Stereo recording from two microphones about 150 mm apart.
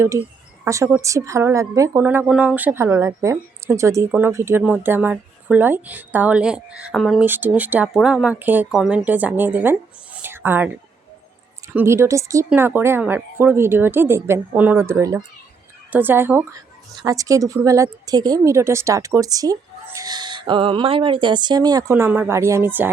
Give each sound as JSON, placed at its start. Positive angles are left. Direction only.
{"t": 0.6, "sound": "a woman's voice", "side_deg": -20}
{"t": 7.3, "sound": "a woman's voice", "side_deg": -10}
{"t": 10.2, "sound": "a sound", "side_deg": -15}
{"t": 11.7, "sound": "a woman's voice", "side_deg": -15}